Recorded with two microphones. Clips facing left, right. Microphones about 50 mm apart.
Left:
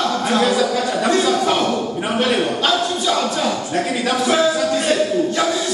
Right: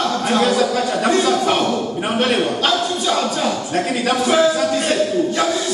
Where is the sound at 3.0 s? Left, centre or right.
Centre.